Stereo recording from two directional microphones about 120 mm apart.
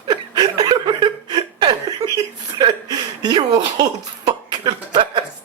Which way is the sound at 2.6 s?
35° right (ahead or behind).